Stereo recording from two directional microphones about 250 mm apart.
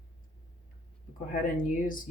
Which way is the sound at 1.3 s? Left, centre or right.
Left.